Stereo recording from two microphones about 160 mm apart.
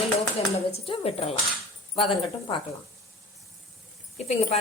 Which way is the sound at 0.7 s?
40° left (ahead or behind).